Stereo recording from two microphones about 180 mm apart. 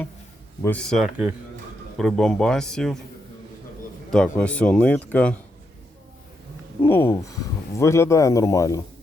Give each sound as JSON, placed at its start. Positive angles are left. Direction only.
{"t": 0.6, "sound": "speech", "side_deg": 5}
{"t": 4.1, "sound": "speech", "side_deg": 5}
{"t": 6.8, "sound": "speech", "side_deg": 10}